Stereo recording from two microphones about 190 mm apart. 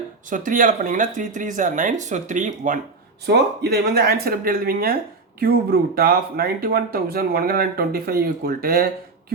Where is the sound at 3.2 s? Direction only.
60° right (ahead or behind).